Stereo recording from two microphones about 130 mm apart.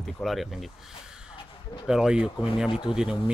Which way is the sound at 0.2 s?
Centre (ahead or behind).